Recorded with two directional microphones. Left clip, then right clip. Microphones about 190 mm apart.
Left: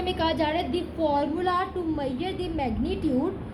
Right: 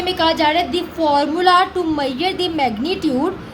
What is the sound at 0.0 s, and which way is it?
A woman's voice, 15° right (ahead or behind).